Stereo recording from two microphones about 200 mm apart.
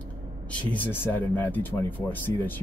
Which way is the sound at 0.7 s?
10° left (ahead or behind).